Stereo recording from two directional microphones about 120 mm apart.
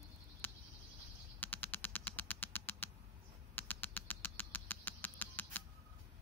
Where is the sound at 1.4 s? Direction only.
15° left (ahead or behind).